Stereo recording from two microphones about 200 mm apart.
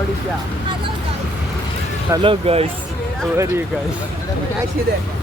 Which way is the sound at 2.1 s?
25° right (ahead or behind).